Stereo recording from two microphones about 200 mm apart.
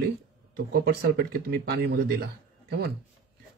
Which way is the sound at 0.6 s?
50° right (ahead or behind).